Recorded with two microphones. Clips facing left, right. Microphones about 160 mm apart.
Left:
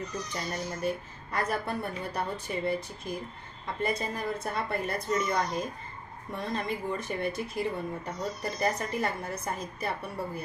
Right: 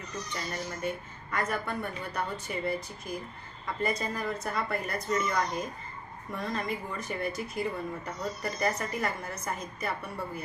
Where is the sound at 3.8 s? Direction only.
25° left (ahead or behind).